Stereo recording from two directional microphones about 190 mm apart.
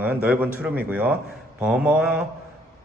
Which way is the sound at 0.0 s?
5° right (ahead or behind).